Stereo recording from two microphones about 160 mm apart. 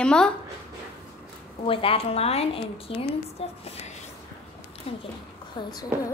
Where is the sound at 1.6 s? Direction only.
35° left (ahead or behind).